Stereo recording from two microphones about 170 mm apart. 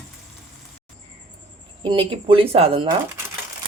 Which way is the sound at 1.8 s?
30° right (ahead or behind).